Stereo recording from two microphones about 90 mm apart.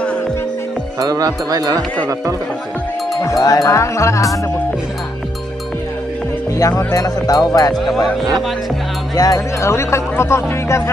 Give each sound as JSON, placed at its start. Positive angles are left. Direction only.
{"t": 0.9, "sound": "speech", "side_deg": -45}
{"t": 3.2, "sound": "speech", "side_deg": 40}
{"t": 6.8, "sound": "speech", "side_deg": 40}
{"t": 7.7, "sound": "speech", "side_deg": 0}
{"t": 9.1, "sound": "speech", "side_deg": 40}